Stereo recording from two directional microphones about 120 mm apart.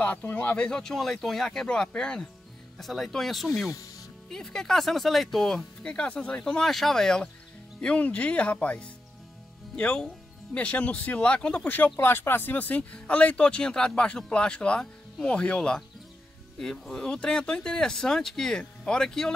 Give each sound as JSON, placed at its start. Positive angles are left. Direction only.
{"t": 0.0, "sound": "speech", "side_deg": 10}
{"t": 3.7, "sound": "speech", "side_deg": 30}
{"t": 4.3, "sound": "speech", "side_deg": 5}